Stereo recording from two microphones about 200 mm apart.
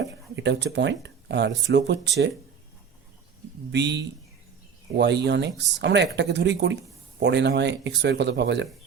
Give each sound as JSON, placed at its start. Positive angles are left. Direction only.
{"t": 0.0, "sound": "speech", "side_deg": -60}
{"t": 3.7, "sound": "speech", "side_deg": -60}